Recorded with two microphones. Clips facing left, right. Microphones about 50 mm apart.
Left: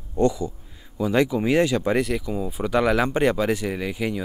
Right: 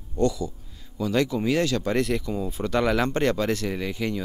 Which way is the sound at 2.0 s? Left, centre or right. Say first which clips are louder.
Left 1 dB; centre.